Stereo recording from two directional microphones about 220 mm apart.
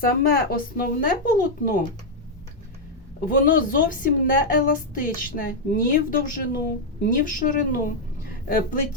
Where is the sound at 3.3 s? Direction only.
40° left (ahead or behind).